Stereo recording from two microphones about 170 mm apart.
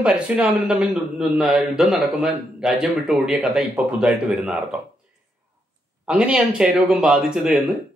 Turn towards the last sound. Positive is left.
turn(degrees=0)  # may be behind; listen again after turning